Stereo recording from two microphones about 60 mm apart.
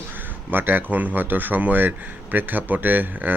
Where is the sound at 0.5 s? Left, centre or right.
Right.